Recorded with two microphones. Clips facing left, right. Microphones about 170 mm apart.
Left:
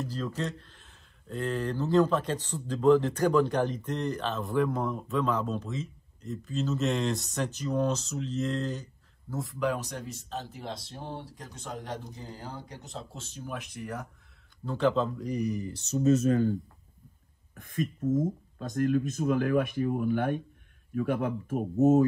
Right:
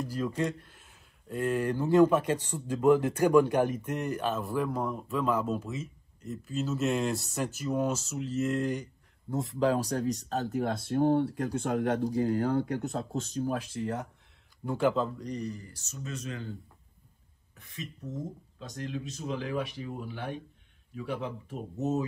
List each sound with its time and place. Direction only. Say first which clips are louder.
0.4 s a man's voice: right 3 dB; 10° right (ahead or behind); by 10.7 s 40° right (ahead or behind)
10.9 s speech: right 15 dB; 60° right (ahead or behind)
13.1 s speech: right 8 dB; 40° right (ahead or behind)
14.6 s a man's voice: left 1 dB; 10° right (ahead or behind); by 15.8 s 20° left (ahead or behind)
15.9 s speech: left 16 dB; 40° left (ahead or behind)
17.6 s speech: left 11 dB; 50° left (ahead or behind)